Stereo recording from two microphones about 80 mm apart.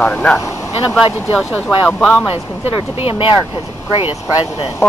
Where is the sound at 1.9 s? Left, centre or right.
Centre.